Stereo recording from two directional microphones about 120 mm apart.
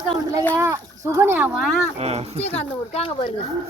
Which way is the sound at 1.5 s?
Centre (ahead or behind).